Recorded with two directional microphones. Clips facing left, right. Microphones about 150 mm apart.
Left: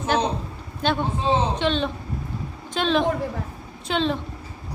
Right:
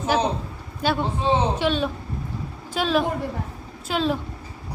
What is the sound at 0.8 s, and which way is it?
A man's voice, 5° right (ahead or behind).